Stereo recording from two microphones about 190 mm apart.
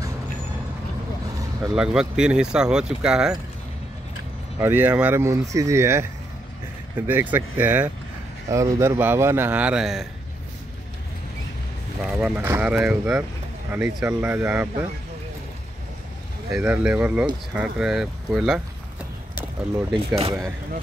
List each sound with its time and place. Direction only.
1.7 s speech: 5° right (ahead or behind)
4.6 s speech: 10° right (ahead or behind)
7.1 s speech: 10° right (ahead or behind)
12.0 s speech: 5° right (ahead or behind)
16.5 s speech: 5° right (ahead or behind)
19.9 s speech: 30° right (ahead or behind)